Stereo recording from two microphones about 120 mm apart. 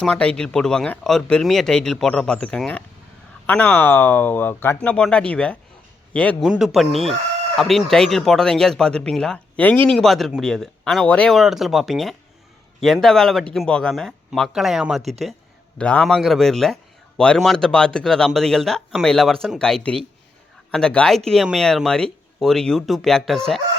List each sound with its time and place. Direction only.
0.0 s speech: 5° left (ahead or behind)
6.4 s speech: 5° right (ahead or behind)
15.8 s speech: 10° left (ahead or behind)